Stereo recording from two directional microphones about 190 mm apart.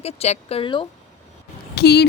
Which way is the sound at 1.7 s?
60° left (ahead or behind).